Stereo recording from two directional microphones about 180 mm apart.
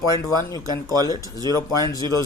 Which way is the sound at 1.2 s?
20° right (ahead or behind).